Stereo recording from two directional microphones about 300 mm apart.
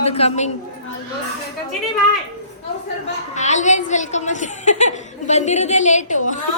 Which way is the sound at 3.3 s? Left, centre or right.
Left.